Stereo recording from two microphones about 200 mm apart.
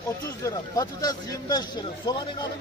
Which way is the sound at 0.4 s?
15° left (ahead or behind).